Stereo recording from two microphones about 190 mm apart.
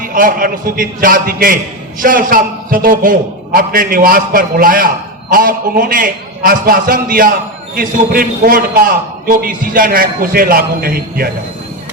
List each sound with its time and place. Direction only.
0.0 s a man's voice: 45° right (ahead or behind)